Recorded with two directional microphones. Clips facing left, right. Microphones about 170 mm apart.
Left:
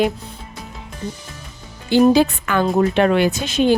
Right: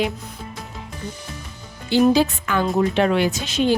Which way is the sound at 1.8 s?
50° left (ahead or behind).